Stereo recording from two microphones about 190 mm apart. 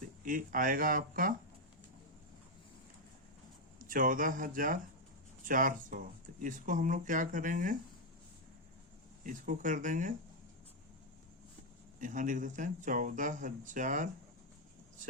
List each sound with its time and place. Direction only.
0.3 s speech: 45° right (ahead or behind)
3.8 s speech: 45° right (ahead or behind)
9.2 s speech: 45° right (ahead or behind)
11.9 s speech: 45° right (ahead or behind)